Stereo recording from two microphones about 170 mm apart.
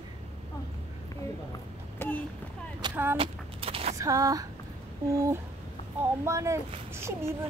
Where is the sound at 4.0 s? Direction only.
20° right (ahead or behind).